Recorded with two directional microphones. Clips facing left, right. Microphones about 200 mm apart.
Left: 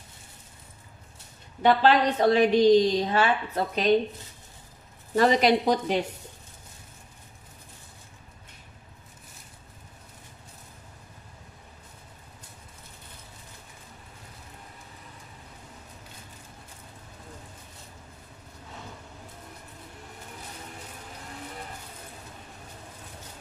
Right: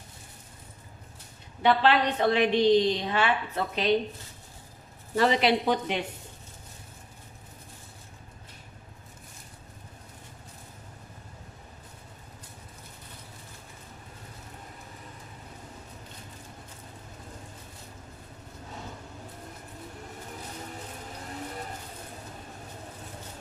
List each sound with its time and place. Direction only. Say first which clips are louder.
1.6 s a woman's voice: left 2 dB; 40° left (ahead or behind)
5.1 s a woman's voice: left 3 dB; 45° left (ahead or behind)